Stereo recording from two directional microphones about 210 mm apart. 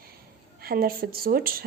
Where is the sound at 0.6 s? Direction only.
45° right (ahead or behind).